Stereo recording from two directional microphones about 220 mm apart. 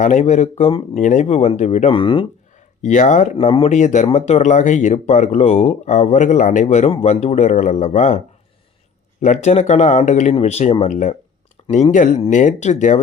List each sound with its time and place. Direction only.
0.0 s speech: 35° left (ahead or behind)
2.8 s speech: 35° left (ahead or behind)
9.2 s speech: 30° left (ahead or behind)